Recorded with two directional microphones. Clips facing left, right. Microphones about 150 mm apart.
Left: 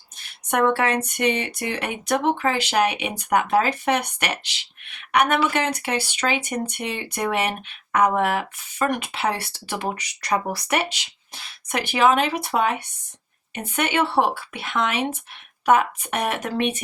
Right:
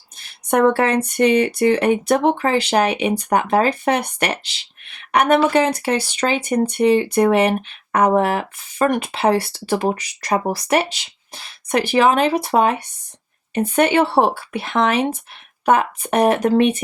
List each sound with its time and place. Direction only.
0.5 s speech: 35° right (ahead or behind)